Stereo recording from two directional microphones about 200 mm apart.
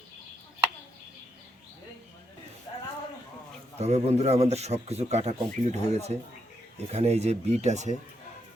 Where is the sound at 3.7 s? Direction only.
35° right (ahead or behind).